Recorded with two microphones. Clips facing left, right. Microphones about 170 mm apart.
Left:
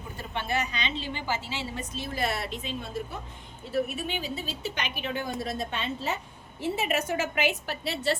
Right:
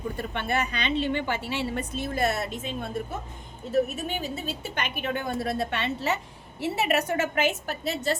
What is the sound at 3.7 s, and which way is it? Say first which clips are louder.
A woman's voice: right 4 dB; 45° right (ahead or behind).